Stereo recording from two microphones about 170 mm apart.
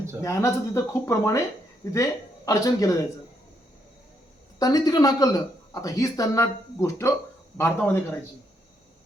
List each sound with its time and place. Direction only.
0.2 s a man's voice: 20° left (ahead or behind)
4.6 s a man's voice: 20° left (ahead or behind)